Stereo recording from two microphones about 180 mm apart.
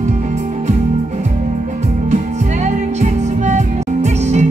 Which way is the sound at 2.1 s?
40° right (ahead or behind).